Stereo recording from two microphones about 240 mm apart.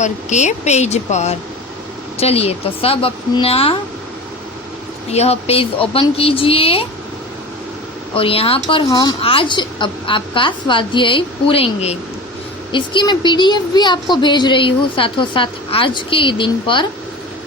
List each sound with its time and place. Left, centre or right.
0.0 s a woman's voice: left
5.1 s a woman's voice: left
8.1 s a woman's voice: left